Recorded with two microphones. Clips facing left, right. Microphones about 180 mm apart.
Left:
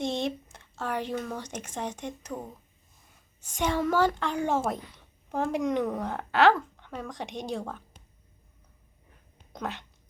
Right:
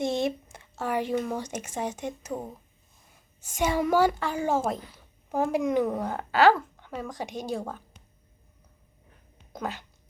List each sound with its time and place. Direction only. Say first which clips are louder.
0.0 s speech: right 3 dB; 10° right (ahead or behind)
3.4 s speech: right 2 dB; 5° right (ahead or behind)
9.5 s speech: right 1 dB; 5° right (ahead or behind)